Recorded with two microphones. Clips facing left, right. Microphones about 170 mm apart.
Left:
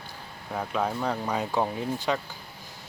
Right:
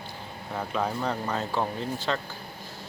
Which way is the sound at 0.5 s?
Centre (ahead or behind).